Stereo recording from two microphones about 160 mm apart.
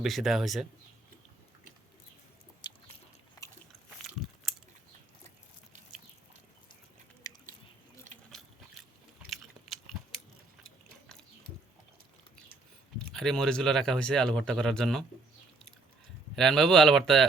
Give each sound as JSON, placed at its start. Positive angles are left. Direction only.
{"t": 0.0, "sound": "speech", "side_deg": 0}
{"t": 2.6, "sound": "biting", "side_deg": 25}
{"t": 7.3, "sound": "a sound", "side_deg": 20}
{"t": 9.3, "sound": "biting", "side_deg": 0}
{"t": 13.1, "sound": "speech", "side_deg": 5}
{"t": 16.3, "sound": "speech", "side_deg": 0}